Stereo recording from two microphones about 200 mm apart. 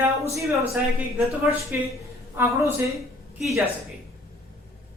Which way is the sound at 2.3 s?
15° right (ahead or behind).